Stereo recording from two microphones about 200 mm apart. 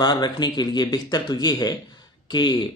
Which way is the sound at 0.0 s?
20° left (ahead or behind).